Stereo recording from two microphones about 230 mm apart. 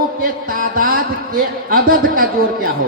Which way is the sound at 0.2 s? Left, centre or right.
Right.